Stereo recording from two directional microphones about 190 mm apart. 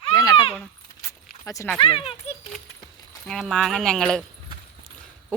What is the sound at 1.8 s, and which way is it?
Speech, 30° left (ahead or behind).